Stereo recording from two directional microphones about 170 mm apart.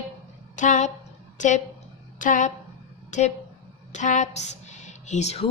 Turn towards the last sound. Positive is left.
turn(degrees=40)  # may be behind; listen again after turning